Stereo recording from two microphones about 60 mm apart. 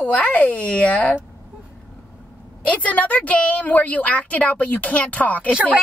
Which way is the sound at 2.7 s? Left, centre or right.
Left.